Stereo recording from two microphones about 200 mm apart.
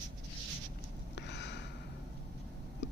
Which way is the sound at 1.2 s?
60° left (ahead or behind).